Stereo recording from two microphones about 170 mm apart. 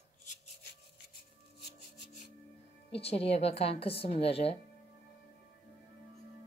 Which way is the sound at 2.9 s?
35° left (ahead or behind).